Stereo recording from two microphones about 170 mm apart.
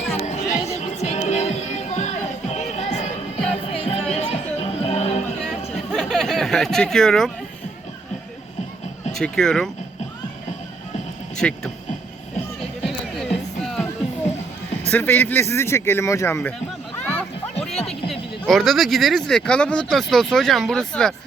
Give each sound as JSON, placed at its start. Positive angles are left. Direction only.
{"t": 0.1, "sound": "music", "side_deg": 40}
{"t": 5.9, "sound": "a sound", "side_deg": 0}
{"t": 9.1, "sound": "speech", "side_deg": 5}
{"t": 11.3, "sound": "speech", "side_deg": 5}
{"t": 12.8, "sound": "music", "side_deg": 0}
{"t": 14.8, "sound": "speech", "side_deg": 10}
{"t": 17.0, "sound": "music", "side_deg": 10}
{"t": 17.7, "sound": "a sound", "side_deg": 35}
{"t": 18.1, "sound": "speech", "side_deg": 0}